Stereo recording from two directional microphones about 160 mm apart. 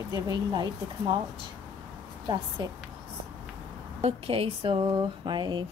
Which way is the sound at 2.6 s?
30° right (ahead or behind).